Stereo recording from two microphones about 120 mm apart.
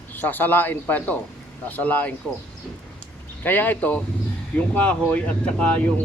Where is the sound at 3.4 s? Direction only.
15° left (ahead or behind).